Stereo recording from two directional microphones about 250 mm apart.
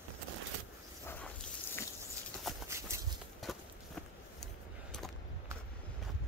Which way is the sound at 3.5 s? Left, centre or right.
Centre.